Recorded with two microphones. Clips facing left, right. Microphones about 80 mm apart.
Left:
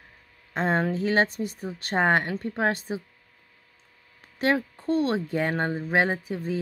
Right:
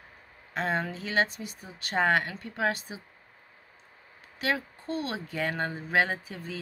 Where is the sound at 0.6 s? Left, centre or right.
Left.